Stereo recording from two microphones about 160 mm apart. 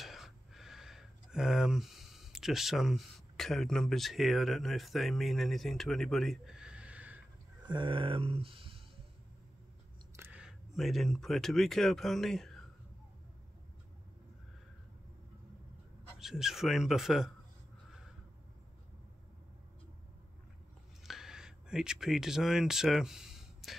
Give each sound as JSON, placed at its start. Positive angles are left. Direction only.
{"t": 0.0, "sound": "speech", "side_deg": 0}
{"t": 7.6, "sound": "speech", "side_deg": -30}
{"t": 10.1, "sound": "speech", "side_deg": -10}
{"t": 16.2, "sound": "speech", "side_deg": 0}
{"t": 21.0, "sound": "a sound", "side_deg": 0}